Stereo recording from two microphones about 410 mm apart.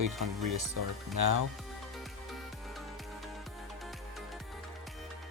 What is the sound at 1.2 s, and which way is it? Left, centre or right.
Speech, right.